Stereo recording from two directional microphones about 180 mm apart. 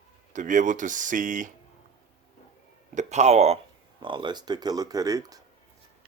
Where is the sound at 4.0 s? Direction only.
25° right (ahead or behind).